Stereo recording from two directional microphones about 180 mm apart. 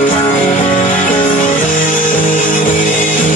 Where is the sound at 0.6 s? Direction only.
45° left (ahead or behind).